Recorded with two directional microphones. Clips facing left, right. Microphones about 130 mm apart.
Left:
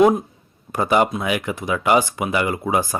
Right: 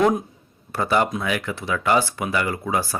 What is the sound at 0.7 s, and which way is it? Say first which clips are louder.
A man's voice: left 3 dB; 15° left (ahead or behind).